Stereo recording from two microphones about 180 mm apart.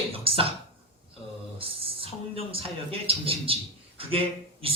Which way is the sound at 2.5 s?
30° right (ahead or behind).